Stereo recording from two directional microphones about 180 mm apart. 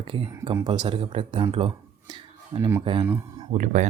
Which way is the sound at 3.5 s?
40° right (ahead or behind).